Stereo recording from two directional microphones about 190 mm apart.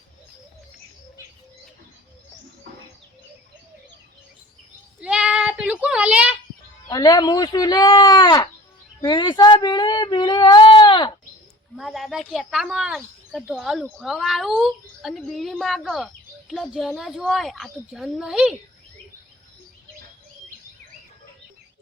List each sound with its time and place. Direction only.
4.9 s a sound: 5° right (ahead or behind)
6.8 s speech: 20° left (ahead or behind)
11.8 s speech: centre (ahead or behind)